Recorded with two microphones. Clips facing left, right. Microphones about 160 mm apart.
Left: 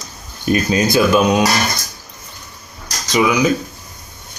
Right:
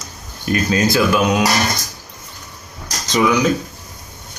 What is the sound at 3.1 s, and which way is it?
Speech, 10° left (ahead or behind).